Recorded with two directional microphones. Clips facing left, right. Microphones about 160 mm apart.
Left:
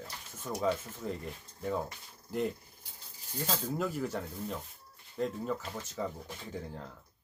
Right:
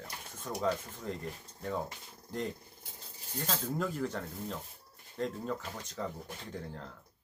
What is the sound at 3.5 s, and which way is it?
Speech, 5° left (ahead or behind).